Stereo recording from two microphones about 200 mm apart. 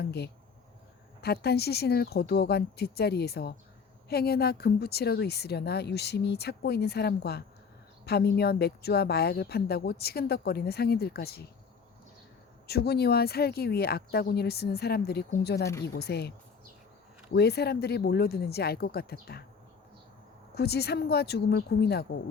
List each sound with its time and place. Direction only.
0.0 s a woman's voice: 55° left (ahead or behind)
12.6 s a woman's voice: 55° left (ahead or behind)
17.3 s a woman's voice: 55° left (ahead or behind)
20.6 s speech: 55° left (ahead or behind)